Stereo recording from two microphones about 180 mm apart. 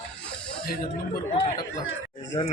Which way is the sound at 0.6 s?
55° left (ahead or behind).